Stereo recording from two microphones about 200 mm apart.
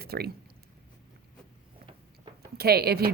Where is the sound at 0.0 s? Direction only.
50° right (ahead or behind).